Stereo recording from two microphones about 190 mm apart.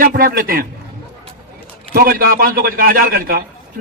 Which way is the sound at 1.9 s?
50° right (ahead or behind).